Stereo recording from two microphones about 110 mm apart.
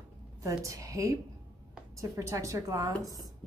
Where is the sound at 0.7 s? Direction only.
30° right (ahead or behind).